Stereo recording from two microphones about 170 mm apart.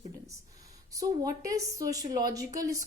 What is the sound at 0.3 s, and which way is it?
A woman's voice, 20° right (ahead or behind).